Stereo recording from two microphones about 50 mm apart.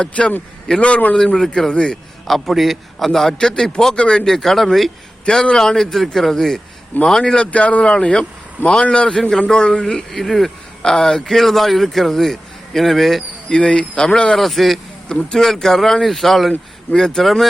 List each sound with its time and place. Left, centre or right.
0.0 s speech: left
1.2 s speech: centre
2.2 s speech: centre
5.2 s speech: centre
7.5 s speech: left
10.1 s speech: centre
13.5 s speech: left
14.3 s speech: centre
15.1 s speech: centre